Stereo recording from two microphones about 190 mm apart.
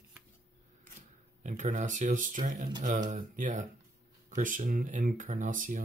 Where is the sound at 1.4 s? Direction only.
40° right (ahead or behind).